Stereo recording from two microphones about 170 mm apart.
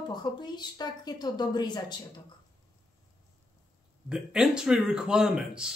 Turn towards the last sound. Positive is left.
turn(degrees=-5)  # may be behind; listen again after turning